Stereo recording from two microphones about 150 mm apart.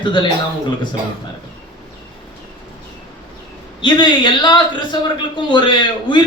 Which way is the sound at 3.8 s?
30° left (ahead or behind).